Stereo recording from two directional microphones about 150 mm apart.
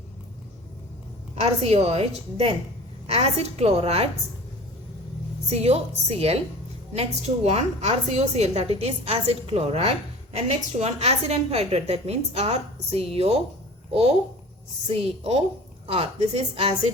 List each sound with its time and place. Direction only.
1.4 s a woman's voice: 45° right (ahead or behind)
5.5 s a woman's voice: 45° right (ahead or behind)
14.8 s a woman's voice: 40° right (ahead or behind)